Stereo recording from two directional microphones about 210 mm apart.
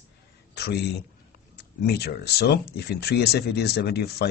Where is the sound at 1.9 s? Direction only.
50° left (ahead or behind).